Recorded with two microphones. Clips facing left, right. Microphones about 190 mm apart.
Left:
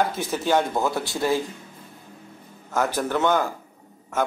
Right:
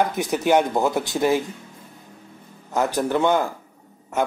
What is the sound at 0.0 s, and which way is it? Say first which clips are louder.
Speech: right 3 dB; 15° right (ahead or behind).